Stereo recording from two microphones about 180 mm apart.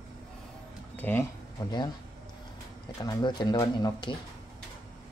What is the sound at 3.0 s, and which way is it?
Speech, 25° left (ahead or behind).